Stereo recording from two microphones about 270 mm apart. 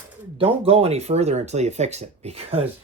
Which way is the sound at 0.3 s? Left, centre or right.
Right.